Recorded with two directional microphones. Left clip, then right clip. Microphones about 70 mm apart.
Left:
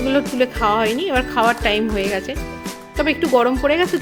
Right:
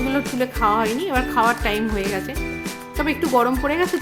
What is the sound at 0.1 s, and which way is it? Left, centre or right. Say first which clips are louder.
Speech: left 5 dB; left.